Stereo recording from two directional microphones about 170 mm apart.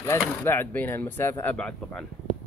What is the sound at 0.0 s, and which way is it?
Speech, 15° left (ahead or behind).